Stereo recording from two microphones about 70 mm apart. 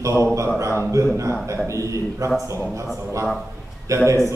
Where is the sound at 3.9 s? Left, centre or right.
Right.